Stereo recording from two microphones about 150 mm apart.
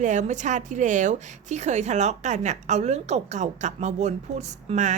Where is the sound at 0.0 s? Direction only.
55° right (ahead or behind).